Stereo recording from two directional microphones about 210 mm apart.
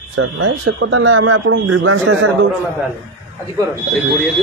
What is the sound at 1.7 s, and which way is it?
Speech, 80° right.